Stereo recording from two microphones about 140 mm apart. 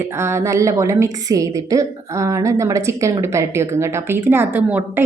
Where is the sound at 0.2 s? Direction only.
20° right (ahead or behind).